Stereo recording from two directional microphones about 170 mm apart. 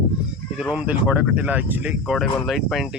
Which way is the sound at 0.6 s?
5° right (ahead or behind).